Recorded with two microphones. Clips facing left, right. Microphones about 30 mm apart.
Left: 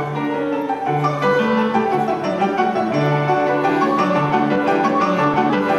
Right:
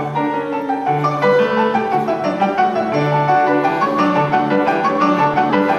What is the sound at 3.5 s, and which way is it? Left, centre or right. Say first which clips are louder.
Music: right 1 dB; centre.